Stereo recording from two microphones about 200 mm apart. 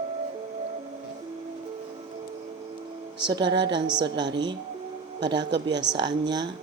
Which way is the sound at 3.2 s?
20° right (ahead or behind).